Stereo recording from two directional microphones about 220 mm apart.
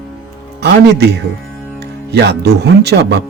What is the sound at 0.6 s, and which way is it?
Speech, 50° right (ahead or behind).